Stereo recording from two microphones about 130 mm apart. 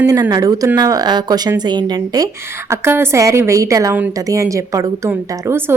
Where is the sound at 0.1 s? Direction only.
30° right (ahead or behind).